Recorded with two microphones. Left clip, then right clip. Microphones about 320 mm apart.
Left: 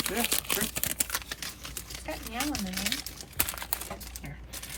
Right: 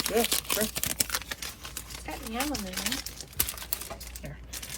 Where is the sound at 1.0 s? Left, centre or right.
Right.